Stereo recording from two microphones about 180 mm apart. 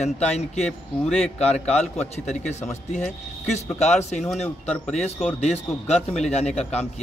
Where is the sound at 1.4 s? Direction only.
35° left (ahead or behind).